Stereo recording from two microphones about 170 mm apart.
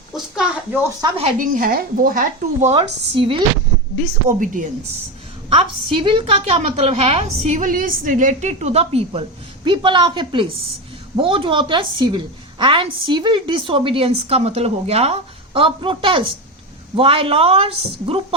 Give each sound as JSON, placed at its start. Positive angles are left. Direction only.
{"t": 0.1, "sound": "a sound", "side_deg": -5}
{"t": 1.0, "sound": "a woman's voice", "side_deg": -35}
{"t": 1.4, "sound": "a woman's voice", "side_deg": -55}
{"t": 4.3, "sound": "speech", "side_deg": -50}
{"t": 5.5, "sound": "a woman's voice", "side_deg": -30}